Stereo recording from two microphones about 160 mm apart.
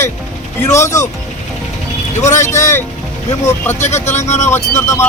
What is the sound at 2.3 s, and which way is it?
Speech, 15° left (ahead or behind).